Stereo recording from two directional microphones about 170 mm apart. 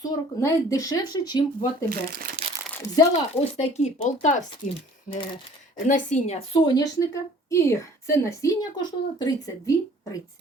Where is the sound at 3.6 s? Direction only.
40° left (ahead or behind); by 9.7 s 20° left (ahead or behind).